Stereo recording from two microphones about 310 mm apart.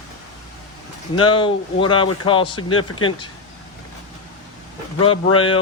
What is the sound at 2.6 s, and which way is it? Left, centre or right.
Speech, left.